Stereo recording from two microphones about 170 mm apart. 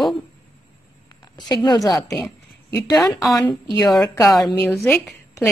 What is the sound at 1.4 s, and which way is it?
Speech, 25° left (ahead or behind).